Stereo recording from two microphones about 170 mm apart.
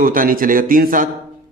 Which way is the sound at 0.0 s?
55° right (ahead or behind).